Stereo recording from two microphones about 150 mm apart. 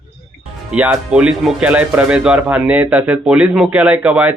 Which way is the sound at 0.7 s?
10° right (ahead or behind).